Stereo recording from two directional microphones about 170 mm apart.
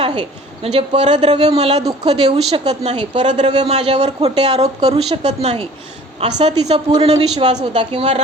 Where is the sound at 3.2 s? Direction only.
45° right (ahead or behind).